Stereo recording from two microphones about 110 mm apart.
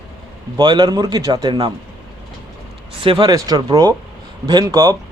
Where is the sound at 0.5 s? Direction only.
40° right (ahead or behind).